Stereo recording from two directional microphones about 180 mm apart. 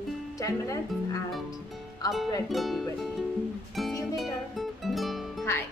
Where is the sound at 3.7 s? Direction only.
Centre (ahead or behind).